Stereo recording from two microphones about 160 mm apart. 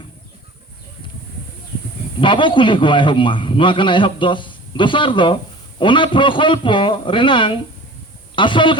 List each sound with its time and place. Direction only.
2.2 s a man's voice: 30° left (ahead or behind)